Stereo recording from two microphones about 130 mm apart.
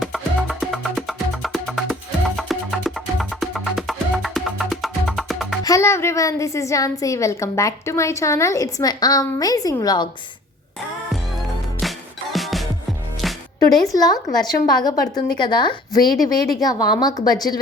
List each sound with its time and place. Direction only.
0.0 s music: centre (ahead or behind)
5.6 s a woman's voice: 25° left (ahead or behind)
11.8 s music: centre (ahead or behind)
13.9 s a woman's voice: 30° left (ahead or behind)